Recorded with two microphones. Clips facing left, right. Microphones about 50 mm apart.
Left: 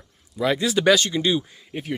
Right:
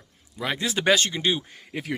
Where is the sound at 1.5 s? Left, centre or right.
Right.